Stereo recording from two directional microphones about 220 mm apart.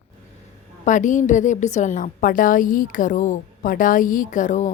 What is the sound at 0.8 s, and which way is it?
A woman's voice, 35° left (ahead or behind).